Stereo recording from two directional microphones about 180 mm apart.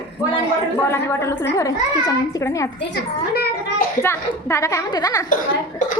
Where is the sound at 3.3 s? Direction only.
60° left (ahead or behind).